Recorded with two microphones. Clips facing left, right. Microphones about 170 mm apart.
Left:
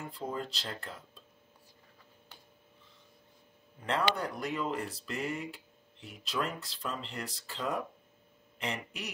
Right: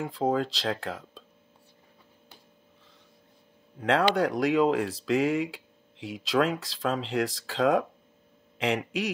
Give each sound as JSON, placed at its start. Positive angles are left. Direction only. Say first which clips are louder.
{"t": 0.0, "sound": "speech", "louder": "right 11 dB", "side_deg": -90}
{"t": 3.8, "sound": "speech", "louder": "right 8 dB", "side_deg": -90}